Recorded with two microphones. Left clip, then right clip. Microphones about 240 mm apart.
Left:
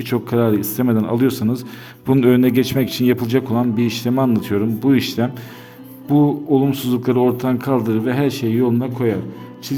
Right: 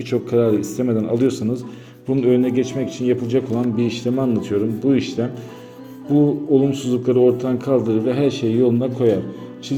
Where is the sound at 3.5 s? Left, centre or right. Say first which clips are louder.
Left 2 dB; left.